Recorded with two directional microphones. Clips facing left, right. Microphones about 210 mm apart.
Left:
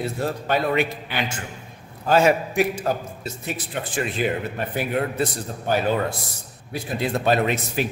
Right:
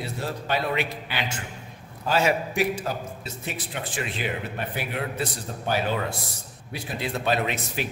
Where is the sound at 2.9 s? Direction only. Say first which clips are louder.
Left 6 dB; 50° left (ahead or behind).